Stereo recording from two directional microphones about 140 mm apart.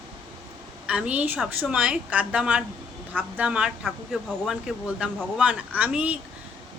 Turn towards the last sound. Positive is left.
turn(degrees=-10)  # may be behind; listen again after turning